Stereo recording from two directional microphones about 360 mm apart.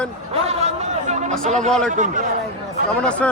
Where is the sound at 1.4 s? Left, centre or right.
Centre.